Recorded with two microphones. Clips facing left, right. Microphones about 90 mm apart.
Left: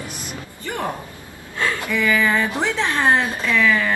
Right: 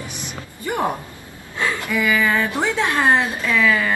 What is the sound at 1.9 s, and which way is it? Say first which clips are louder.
A woman's voice: even; 10° right (ahead or behind).